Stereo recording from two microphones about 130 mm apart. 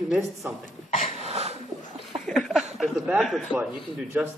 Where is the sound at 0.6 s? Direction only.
55° left (ahead or behind).